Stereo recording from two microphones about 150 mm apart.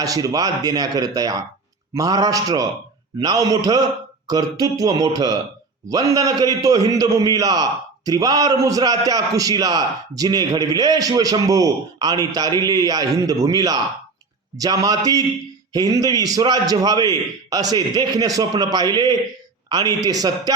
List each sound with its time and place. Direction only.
0.0 s a man's voice: 25° right (ahead or behind)